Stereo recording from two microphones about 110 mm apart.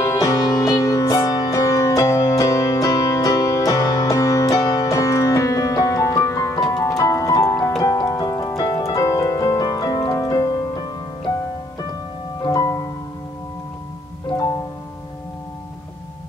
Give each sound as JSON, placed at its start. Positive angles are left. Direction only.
{"t": 0.0, "sound": "music", "side_deg": 30}
{"t": 7.8, "sound": "piano", "side_deg": 35}
{"t": 12.4, "sound": "music", "side_deg": 30}